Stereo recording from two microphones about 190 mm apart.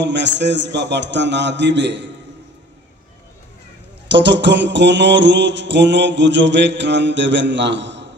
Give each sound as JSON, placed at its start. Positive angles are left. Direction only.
{"t": 0.0, "sound": "mantra", "side_deg": -65}
{"t": 4.1, "sound": "mantra", "side_deg": -65}